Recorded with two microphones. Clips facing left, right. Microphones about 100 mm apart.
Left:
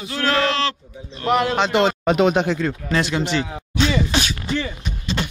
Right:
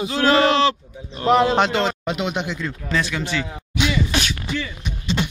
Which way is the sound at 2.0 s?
40° left (ahead or behind).